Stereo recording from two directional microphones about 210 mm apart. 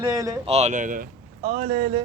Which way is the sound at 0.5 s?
35° right (ahead or behind).